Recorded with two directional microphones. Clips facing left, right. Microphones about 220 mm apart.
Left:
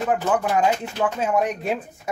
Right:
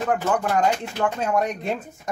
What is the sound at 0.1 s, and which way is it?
Speech, 5° left (ahead or behind).